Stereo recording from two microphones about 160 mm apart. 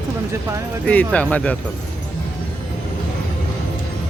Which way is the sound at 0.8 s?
5° left (ahead or behind).